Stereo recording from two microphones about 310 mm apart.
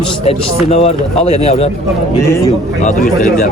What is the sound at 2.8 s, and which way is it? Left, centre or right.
Speech, left.